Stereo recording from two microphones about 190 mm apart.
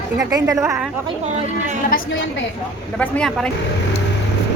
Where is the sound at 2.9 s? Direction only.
5° left (ahead or behind).